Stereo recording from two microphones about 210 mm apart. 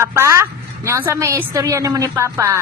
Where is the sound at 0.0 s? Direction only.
15° right (ahead or behind).